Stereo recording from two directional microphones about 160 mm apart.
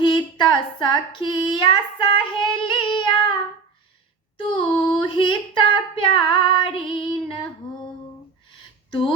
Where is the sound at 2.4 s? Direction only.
30° left (ahead or behind).